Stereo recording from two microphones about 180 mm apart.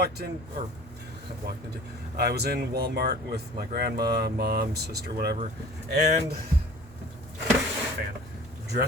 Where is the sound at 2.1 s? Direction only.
60° right (ahead or behind).